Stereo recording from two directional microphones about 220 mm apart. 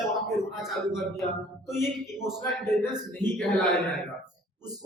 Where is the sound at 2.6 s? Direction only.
10° left (ahead or behind).